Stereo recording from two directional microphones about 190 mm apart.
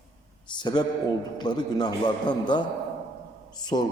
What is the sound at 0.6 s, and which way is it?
A man's voice, 20° left (ahead or behind).